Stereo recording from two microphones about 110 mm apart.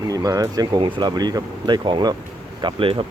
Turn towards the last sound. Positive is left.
turn(degrees=-55)  # may be behind; listen again after turning